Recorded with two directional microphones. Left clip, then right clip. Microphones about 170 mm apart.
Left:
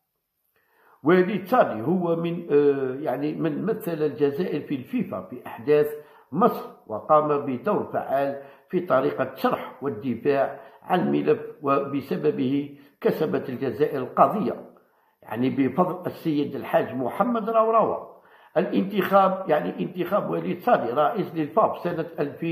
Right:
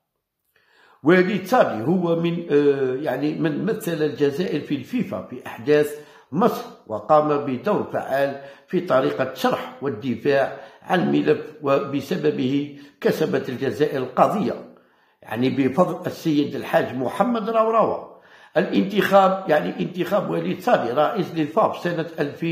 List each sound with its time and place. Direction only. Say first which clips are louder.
1.0 s a man's voice: right 3 dB; 5° right (ahead or behind)